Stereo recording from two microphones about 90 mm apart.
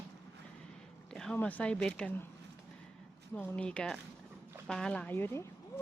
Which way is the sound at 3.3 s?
15° left (ahead or behind).